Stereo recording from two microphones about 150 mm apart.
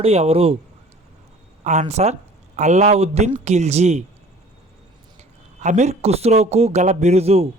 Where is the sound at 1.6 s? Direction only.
50° right (ahead or behind).